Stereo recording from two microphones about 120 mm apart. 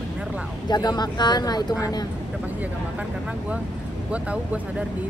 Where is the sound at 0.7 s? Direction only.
35° left (ahead or behind).